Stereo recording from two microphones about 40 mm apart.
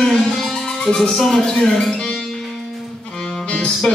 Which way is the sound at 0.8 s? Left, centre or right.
Centre.